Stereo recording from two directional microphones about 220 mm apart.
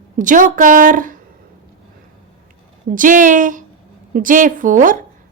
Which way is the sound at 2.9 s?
35° right (ahead or behind).